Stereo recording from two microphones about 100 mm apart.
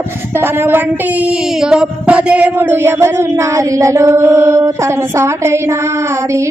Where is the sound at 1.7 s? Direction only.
10° right (ahead or behind); by 4.7 s 30° right (ahead or behind).